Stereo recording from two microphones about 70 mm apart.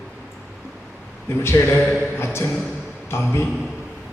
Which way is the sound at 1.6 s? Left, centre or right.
Left.